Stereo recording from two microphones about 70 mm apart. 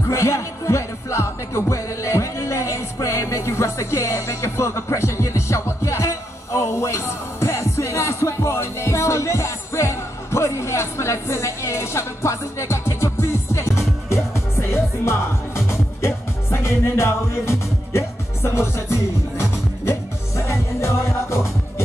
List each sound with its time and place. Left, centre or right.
0.1 s music: left